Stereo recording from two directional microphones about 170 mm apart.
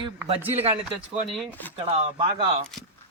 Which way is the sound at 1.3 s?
Centre (ahead or behind).